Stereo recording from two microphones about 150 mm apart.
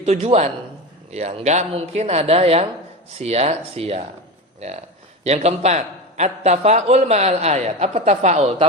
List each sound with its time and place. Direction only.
0.0 s a man's voice: 45° right (ahead or behind)
5.2 s a man's voice: 45° right (ahead or behind)